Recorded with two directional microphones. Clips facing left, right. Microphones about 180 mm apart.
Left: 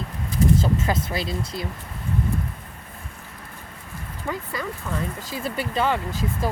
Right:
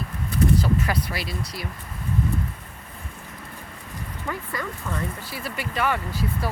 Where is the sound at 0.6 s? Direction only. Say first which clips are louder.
Left 1 dB; 25° left (ahead or behind).